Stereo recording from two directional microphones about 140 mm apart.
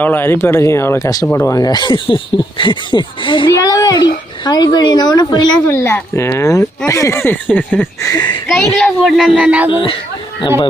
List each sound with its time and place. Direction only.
0.0 s speech: 15° left (ahead or behind); by 3.5 s 35° left (ahead or behind)
3.5 s speech: 25° left (ahead or behind)
5.6 s speech: 20° left (ahead or behind)
8.0 s speech: 30° left (ahead or behind)
8.4 s a woman's voice: centre (ahead or behind)
9.3 s speech: 10° right (ahead or behind)